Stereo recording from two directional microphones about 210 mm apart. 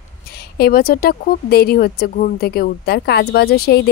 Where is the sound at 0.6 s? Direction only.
45° left (ahead or behind).